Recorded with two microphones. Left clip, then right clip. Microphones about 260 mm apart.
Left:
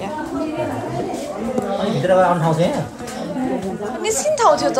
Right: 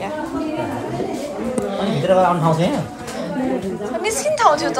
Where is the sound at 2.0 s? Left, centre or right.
Left.